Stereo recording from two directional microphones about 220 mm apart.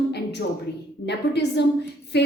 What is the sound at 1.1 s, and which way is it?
A woman's voice, 50° left (ahead or behind).